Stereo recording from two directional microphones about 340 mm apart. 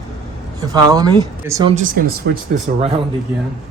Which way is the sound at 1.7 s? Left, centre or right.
Right.